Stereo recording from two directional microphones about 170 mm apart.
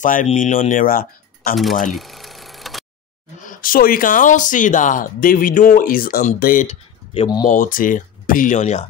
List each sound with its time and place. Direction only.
0.0 s speech: 50° left (ahead or behind)
1.9 s a sound: centre (ahead or behind)
3.4 s speech: 55° left (ahead or behind)